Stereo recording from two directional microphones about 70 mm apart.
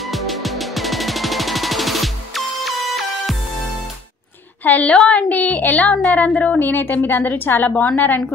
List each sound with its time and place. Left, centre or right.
0.0 s music: centre
4.6 s a woman's voice: left